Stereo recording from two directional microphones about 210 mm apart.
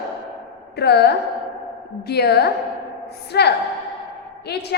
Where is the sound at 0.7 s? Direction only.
50° left (ahead or behind).